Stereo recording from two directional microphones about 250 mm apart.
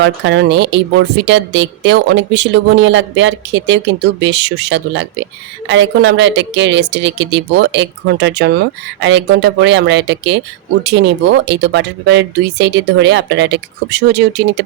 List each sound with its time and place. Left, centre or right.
0.0 s speech: right